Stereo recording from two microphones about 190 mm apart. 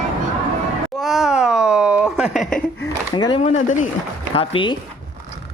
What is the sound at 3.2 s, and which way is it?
Speech, 25° left (ahead or behind).